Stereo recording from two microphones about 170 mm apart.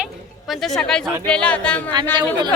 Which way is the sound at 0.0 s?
Centre (ahead or behind).